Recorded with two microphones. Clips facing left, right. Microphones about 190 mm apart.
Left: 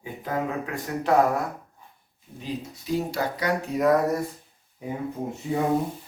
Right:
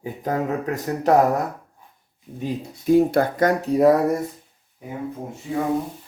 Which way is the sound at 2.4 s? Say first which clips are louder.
Right 5 dB; 55° right (ahead or behind).